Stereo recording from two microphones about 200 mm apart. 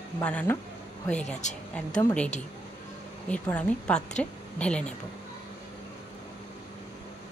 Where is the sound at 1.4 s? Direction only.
35° left (ahead or behind).